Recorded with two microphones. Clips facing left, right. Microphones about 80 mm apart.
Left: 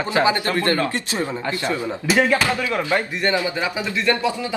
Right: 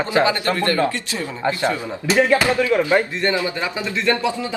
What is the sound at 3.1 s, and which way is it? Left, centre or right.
Speech, centre.